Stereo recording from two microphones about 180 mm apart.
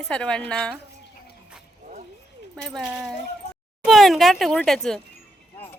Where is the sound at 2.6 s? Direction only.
5° left (ahead or behind).